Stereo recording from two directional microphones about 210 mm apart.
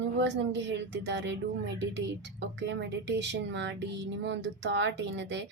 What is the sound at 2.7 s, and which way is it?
A woman's voice, 60° right (ahead or behind).